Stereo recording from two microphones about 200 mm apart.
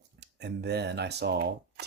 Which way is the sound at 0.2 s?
55° right (ahead or behind).